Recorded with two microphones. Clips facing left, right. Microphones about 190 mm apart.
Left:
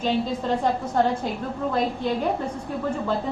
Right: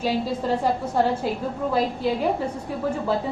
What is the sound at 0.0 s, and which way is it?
A woman's voice, 5° right (ahead or behind).